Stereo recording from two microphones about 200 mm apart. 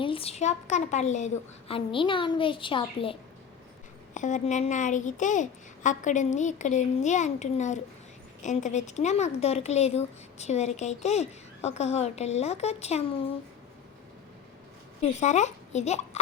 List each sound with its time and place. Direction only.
0.0 s a woman's voice: 30° left (ahead or behind)
4.1 s speech: 40° left (ahead or behind)
15.2 s a child's voice: 35° left (ahead or behind)